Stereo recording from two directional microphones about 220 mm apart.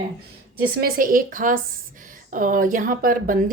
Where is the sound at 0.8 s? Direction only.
40° right (ahead or behind).